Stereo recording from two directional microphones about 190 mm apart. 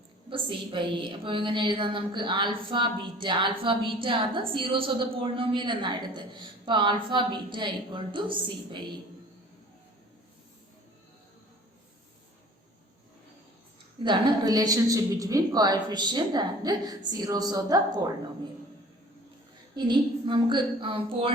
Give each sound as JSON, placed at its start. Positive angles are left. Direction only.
{"t": 0.3, "sound": "a woman's voice", "side_deg": -25}
{"t": 14.0, "sound": "a woman's voice", "side_deg": -25}
{"t": 19.7, "sound": "a woman's voice", "side_deg": -25}